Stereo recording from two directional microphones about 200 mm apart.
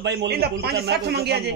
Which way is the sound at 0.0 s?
60° right (ahead or behind).